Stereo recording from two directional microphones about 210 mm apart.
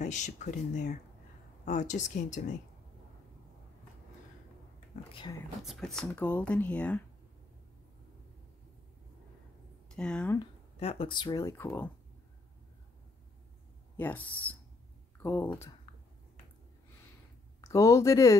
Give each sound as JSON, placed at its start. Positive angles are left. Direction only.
{"t": 0.0, "sound": "speech", "side_deg": 35}
{"t": 4.9, "sound": "speech", "side_deg": 35}
{"t": 5.6, "sound": "speech", "side_deg": 0}
{"t": 9.8, "sound": "speech", "side_deg": 5}
{"t": 10.4, "sound": "speech", "side_deg": 30}
{"t": 13.9, "sound": "speech", "side_deg": 10}
{"t": 17.6, "sound": "speech", "side_deg": 15}